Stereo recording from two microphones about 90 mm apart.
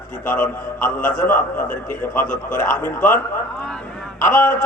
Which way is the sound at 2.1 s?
25° left (ahead or behind).